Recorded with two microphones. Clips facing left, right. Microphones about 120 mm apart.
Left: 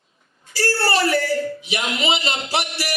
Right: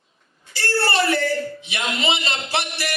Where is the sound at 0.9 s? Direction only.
25° right (ahead or behind).